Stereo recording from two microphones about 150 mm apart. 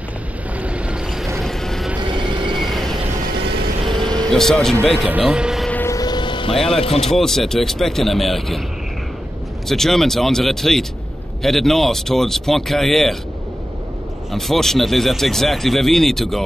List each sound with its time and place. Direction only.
0.6 s vehicle: 10° right (ahead or behind)
2.0 s train: 30° right (ahead or behind)
2.5 s vehicle: centre (ahead or behind)
3.9 s vehicle: 30° right (ahead or behind)
4.3 s speech: 5° left (ahead or behind)
5.7 s vehicle: 15° left (ahead or behind)
5.9 s vehicle: 30° left (ahead or behind)
6.7 s speech: 40° left (ahead or behind)
7.2 s speech: 5° left (ahead or behind)
9.7 s speech: 5° left (ahead or behind)
14.3 s speech: centre (ahead or behind)